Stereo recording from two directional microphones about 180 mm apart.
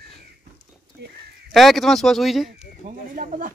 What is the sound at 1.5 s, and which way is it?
Speech, centre (ahead or behind).